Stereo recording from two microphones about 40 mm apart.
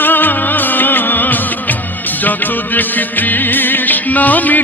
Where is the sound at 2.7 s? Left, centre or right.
Left.